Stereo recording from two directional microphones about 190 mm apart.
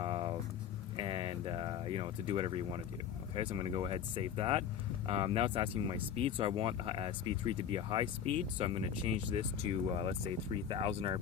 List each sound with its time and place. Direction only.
0.0 s vehicle: 25° right (ahead or behind)
0.9 s a sound: 25° right (ahead or behind)
3.3 s speech: 25° right (ahead or behind)